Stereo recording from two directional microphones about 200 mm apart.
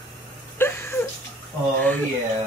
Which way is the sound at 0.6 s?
10° left (ahead or behind).